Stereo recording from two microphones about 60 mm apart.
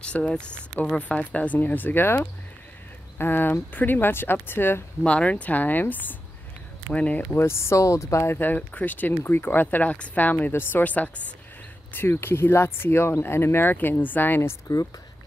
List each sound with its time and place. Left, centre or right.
0.0 s speech: centre; by 4.8 s left
5.0 s speech: left
7.3 s speech: left
8.4 s speech: left
11.9 s speech: left